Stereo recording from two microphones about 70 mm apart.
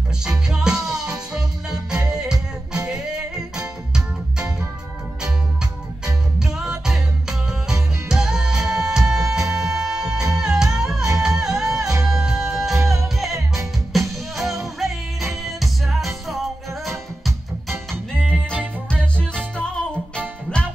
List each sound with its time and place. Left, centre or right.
0.5 s music: centre
6.4 s music: centre
17.6 s music: right
19.1 s music: centre